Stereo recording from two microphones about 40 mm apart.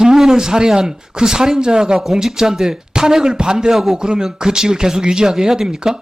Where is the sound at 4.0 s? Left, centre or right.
Centre.